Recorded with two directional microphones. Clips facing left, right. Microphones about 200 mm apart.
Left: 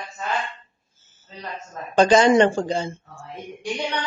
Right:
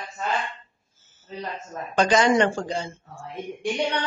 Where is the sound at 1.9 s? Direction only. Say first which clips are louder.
Left 4 dB; 30° left (ahead or behind).